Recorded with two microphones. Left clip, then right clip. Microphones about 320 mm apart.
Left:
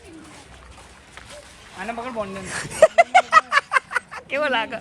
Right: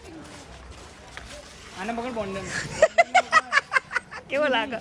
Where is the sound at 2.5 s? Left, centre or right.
Centre.